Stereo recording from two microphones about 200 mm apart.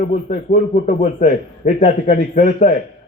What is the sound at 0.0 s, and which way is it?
A man's voice, 40° left (ahead or behind).